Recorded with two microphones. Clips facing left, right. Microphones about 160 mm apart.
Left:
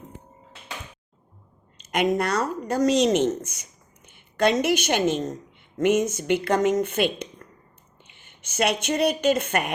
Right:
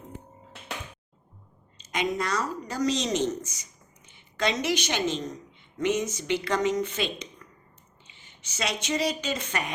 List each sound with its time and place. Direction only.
1.8 s a woman's voice: 55° left (ahead or behind)